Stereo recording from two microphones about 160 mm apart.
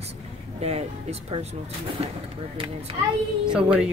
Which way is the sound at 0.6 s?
40° right (ahead or behind).